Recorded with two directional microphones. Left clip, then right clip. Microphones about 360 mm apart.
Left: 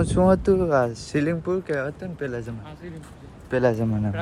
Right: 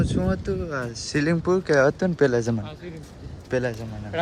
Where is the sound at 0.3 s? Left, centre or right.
Centre.